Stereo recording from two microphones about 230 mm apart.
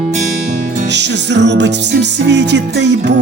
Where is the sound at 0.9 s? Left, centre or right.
Right.